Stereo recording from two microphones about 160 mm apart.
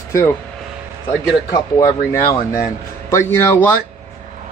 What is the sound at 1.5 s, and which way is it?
Speech, 20° left (ahead or behind).